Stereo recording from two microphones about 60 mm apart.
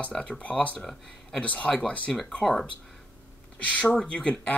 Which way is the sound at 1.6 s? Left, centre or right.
Centre.